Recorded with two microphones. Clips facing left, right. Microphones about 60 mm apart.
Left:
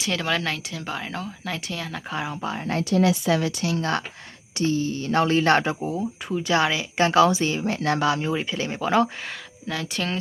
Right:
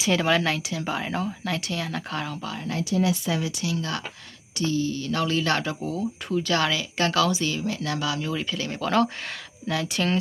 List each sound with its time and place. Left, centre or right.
0.0 s speech: centre
2.1 s speech: centre
2.9 s speech: left
3.6 s speech: left
5.8 s speech: centre
9.6 s speech: centre